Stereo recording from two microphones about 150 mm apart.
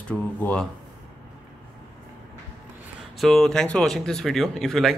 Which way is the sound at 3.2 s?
5° left (ahead or behind).